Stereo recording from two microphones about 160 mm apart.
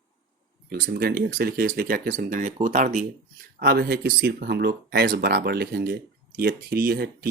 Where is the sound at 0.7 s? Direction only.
70° right (ahead or behind); by 3.0 s 55° right (ahead or behind).